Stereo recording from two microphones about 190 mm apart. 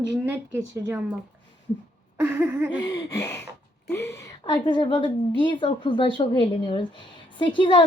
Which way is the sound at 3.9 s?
15° left (ahead or behind).